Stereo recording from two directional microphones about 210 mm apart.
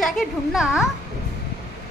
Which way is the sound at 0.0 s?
Centre (ahead or behind).